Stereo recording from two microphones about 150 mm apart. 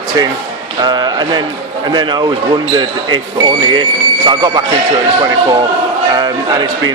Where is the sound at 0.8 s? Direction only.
30° right (ahead or behind).